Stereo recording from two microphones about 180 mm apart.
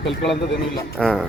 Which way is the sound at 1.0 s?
5° left (ahead or behind).